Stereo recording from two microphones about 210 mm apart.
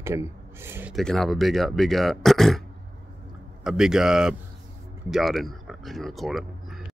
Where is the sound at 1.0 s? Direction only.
Centre (ahead or behind).